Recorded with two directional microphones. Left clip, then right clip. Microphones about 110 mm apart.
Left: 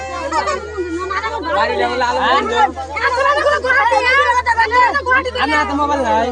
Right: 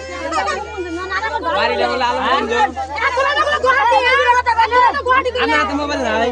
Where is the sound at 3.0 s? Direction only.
35° right (ahead or behind).